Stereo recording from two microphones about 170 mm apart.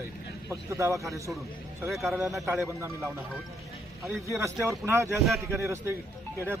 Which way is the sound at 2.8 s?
15° right (ahead or behind).